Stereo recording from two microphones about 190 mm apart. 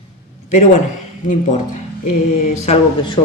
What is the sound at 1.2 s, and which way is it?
Speech, 40° left (ahead or behind).